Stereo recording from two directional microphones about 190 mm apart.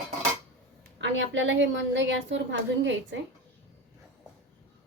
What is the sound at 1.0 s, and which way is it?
A woman's voice, 75° right (ahead or behind).